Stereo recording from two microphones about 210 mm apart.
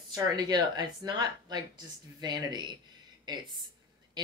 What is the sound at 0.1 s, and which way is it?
Speech, 20° right (ahead or behind).